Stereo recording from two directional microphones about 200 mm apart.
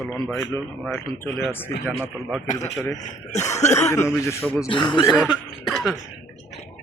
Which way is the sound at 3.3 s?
35° left (ahead or behind).